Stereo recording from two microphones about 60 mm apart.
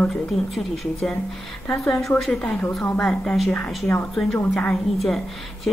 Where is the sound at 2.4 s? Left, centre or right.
Left.